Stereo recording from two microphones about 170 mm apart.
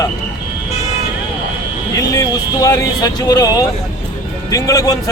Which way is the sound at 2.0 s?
20° left (ahead or behind).